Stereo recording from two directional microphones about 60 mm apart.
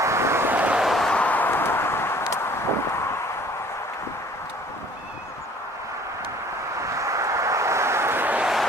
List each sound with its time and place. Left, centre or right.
0.0 s vehicle: right
0.4 s vehicle: right
0.8 s a sound: centre
1.1 s a sound: left
6.8 s vehicle: right
8.2 s vehicle: right